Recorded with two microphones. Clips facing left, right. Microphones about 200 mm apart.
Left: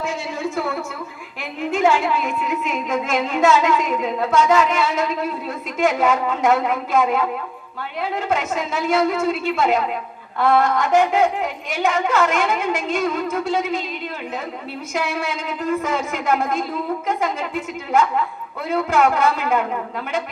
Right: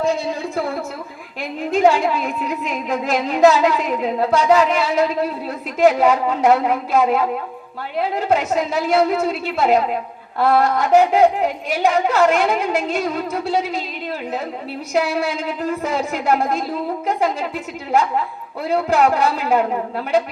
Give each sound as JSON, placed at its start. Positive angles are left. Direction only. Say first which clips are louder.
{"t": 1.4, "sound": "a woman's voice", "louder": "right 3 dB", "side_deg": -35}
{"t": 14.9, "sound": "a woman's voice", "louder": "right 5 dB", "side_deg": -35}
{"t": 18.7, "sound": "a woman's voice", "louder": "right 2 dB", "side_deg": -35}